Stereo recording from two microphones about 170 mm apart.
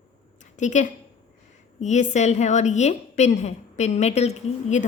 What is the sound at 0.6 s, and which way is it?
A woman's voice, 45° left (ahead or behind).